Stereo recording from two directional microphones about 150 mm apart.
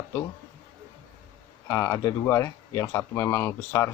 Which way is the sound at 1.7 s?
20° left (ahead or behind).